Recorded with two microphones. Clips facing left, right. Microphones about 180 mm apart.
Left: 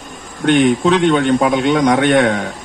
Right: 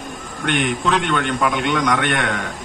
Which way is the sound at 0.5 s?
35° left (ahead or behind).